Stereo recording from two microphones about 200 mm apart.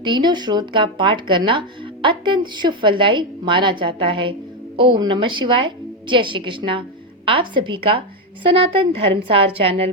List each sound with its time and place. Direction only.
0.0 s speech: 20° right (ahead or behind)